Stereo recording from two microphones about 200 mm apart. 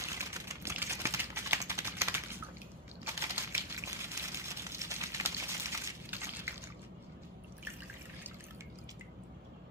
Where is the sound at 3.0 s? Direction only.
15° right (ahead or behind).